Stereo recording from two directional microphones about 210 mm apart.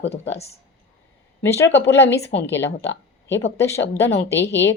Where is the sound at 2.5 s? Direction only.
55° left (ahead or behind).